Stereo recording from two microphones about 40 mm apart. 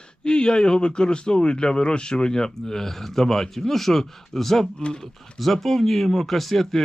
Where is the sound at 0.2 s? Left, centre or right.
Left; by 4.7 s centre.